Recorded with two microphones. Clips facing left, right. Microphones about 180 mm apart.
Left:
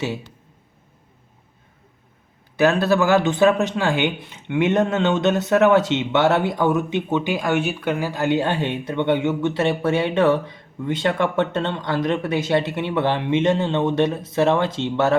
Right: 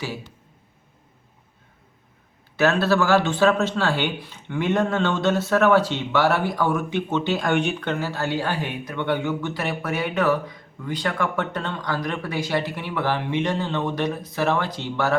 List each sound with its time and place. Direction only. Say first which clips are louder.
2.6 s speech: left 2 dB; 15° left (ahead or behind)